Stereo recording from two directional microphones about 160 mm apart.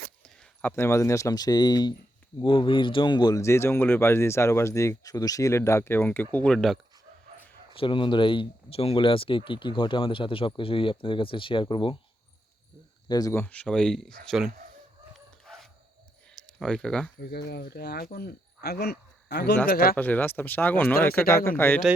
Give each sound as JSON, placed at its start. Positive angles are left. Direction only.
{"t": 0.6, "sound": "speech", "side_deg": 15}
{"t": 7.8, "sound": "speech", "side_deg": 30}
{"t": 13.1, "sound": "speech", "side_deg": 25}
{"t": 13.4, "sound": "speech", "side_deg": 10}
{"t": 16.3, "sound": "a sound", "side_deg": 5}
{"t": 17.2, "sound": "cricket", "side_deg": 90}
{"t": 19.6, "sound": "speech", "side_deg": 70}
{"t": 20.0, "sound": "speech", "side_deg": 10}